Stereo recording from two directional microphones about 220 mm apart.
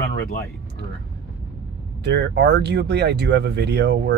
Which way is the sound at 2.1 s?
50° right (ahead or behind).